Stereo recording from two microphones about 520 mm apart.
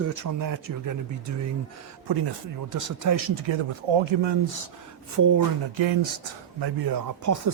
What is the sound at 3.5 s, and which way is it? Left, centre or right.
Speech, right.